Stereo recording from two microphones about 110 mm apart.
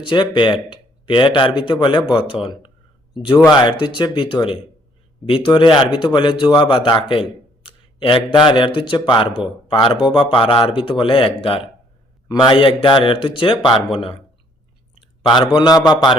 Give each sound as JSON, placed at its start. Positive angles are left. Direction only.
{"t": 0.0, "sound": "a man's voice", "side_deg": 45}
{"t": 15.2, "sound": "a man's voice", "side_deg": 45}